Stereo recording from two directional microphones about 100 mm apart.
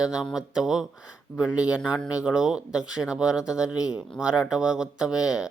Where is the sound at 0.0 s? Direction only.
5° right (ahead or behind).